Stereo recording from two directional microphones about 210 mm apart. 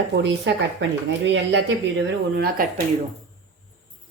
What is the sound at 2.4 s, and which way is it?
Speech, 40° right (ahead or behind).